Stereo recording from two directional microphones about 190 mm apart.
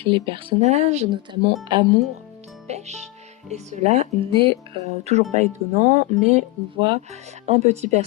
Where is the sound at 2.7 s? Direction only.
35° right (ahead or behind).